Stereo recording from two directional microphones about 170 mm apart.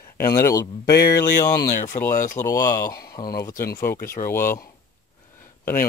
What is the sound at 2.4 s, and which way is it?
Speech, 20° left (ahead or behind).